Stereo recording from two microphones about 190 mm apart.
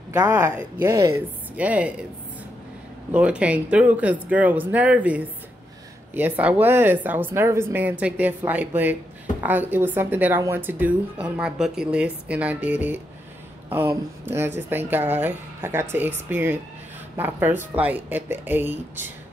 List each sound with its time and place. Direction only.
0.3 s speech: 10° right (ahead or behind)
3.1 s speech: 5° right (ahead or behind)